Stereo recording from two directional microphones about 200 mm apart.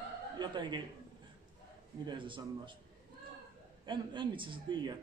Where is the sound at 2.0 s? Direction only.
25° right (ahead or behind).